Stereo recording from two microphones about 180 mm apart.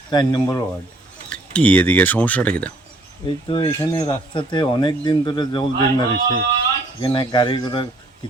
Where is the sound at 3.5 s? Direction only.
30° left (ahead or behind).